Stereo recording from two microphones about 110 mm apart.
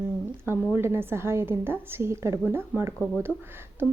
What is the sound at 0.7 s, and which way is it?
A woman's voice, 20° right (ahead or behind).